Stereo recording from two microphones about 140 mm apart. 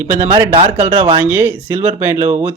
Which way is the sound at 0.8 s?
15° right (ahead or behind).